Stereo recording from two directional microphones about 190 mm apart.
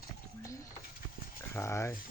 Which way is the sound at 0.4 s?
15° left (ahead or behind).